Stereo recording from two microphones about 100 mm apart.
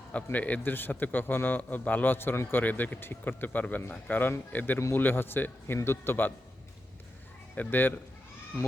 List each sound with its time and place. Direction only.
0.1 s a man's voice: 15° left (ahead or behind)
7.5 s a man's voice: 20° left (ahead or behind)